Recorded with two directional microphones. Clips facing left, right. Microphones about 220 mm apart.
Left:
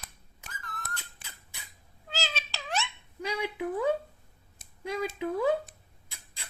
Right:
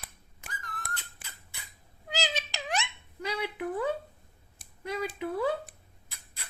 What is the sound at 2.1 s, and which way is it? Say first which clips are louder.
Meow: right 3 dB; 15° right (ahead or behind).